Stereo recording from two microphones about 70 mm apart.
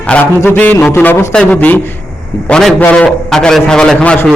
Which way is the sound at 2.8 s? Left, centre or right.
Left.